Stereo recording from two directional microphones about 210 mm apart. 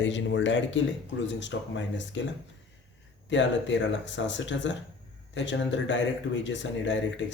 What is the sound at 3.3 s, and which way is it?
Speech, 60° left (ahead or behind).